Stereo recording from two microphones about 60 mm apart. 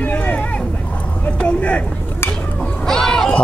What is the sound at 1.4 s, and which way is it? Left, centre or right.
Speech, centre.